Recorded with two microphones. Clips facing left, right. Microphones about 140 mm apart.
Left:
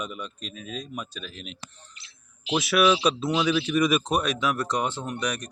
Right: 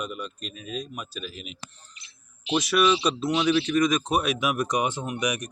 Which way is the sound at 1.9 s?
90° left.